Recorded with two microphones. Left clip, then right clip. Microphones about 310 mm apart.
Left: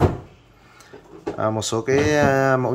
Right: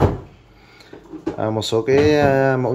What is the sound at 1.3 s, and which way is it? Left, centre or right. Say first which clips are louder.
Speech: right 2 dB; centre.